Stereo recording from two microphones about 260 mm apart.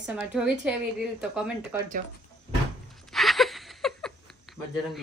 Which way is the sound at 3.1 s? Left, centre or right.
Centre.